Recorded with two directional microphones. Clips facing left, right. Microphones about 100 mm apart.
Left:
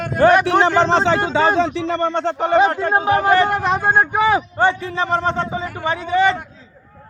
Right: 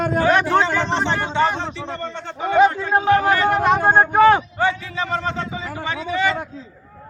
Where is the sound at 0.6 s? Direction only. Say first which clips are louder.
Left 6 dB; 90° left; by 2.5 s 75° left (ahead or behind).